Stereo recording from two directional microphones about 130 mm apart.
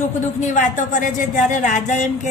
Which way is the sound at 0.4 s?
75° left (ahead or behind).